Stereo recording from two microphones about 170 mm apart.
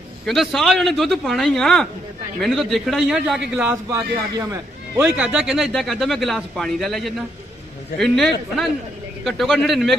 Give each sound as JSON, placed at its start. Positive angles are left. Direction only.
{"t": 0.3, "sound": "a man's voice", "side_deg": 0}
{"t": 9.2, "sound": "a man's voice", "side_deg": 0}